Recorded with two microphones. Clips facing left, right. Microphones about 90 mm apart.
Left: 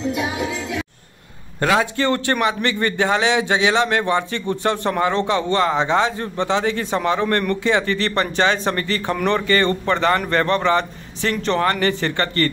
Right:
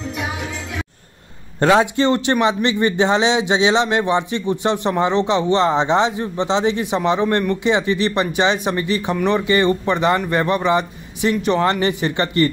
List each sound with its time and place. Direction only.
1.6 s a man's voice: 30° right (ahead or behind)